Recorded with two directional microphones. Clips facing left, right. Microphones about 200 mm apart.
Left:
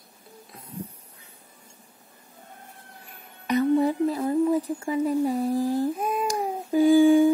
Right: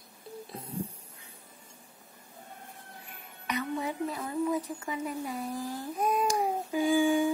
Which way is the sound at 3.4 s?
35° left (ahead or behind).